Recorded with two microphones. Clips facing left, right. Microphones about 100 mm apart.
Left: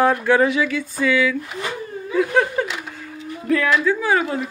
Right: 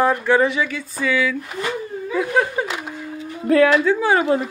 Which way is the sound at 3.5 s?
35° right (ahead or behind).